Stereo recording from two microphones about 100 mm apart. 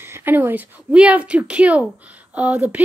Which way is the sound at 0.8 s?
10° right (ahead or behind).